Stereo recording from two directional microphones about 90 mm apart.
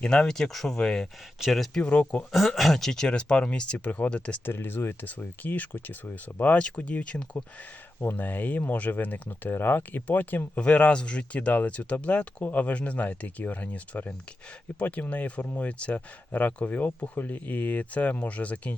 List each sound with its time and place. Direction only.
0.0 s speech: 10° left (ahead or behind)
1.8 s speech: 15° left (ahead or behind)
2.3 s speech: centre (ahead or behind)